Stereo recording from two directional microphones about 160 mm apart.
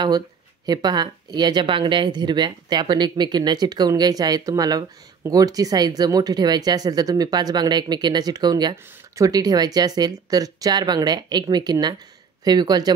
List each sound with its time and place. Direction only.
0.7 s speech: 25° right (ahead or behind)